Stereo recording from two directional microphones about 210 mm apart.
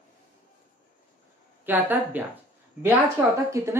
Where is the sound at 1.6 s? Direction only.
10° right (ahead or behind).